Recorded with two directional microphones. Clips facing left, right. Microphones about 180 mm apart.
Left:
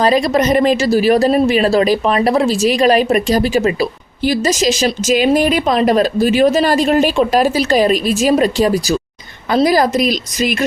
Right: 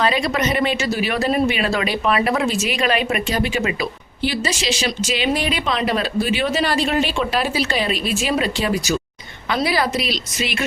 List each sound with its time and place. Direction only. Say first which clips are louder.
0.0 s speech: left 7 dB; 40° left (ahead or behind)